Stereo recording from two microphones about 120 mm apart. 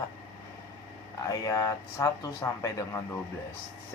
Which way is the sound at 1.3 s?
25° left (ahead or behind).